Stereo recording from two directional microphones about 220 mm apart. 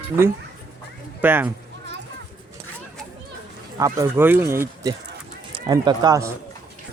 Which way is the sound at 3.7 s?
15° right (ahead or behind).